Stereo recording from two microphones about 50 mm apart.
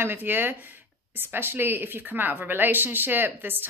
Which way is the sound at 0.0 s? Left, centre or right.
Right.